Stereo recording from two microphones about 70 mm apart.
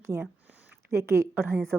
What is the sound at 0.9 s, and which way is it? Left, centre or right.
Speech, right.